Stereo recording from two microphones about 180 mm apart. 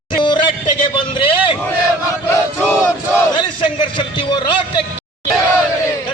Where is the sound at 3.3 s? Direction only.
25° left (ahead or behind).